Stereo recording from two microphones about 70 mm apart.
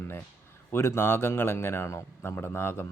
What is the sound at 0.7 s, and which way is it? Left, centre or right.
A man's voice, left.